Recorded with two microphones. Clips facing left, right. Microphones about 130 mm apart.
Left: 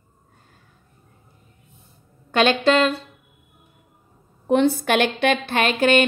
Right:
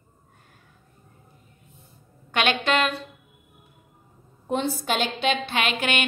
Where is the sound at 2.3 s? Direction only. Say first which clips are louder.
Left 6 dB; 35° left (ahead or behind).